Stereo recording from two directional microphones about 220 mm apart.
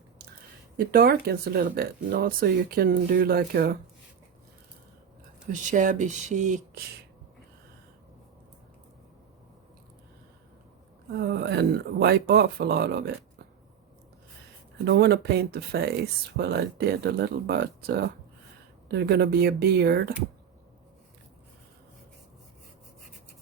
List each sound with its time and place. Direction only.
0.9 s speech: 45° right (ahead or behind)
5.5 s speech: 35° right (ahead or behind)
11.1 s speech: 50° right (ahead or behind)
14.8 s speech: 45° right (ahead or behind)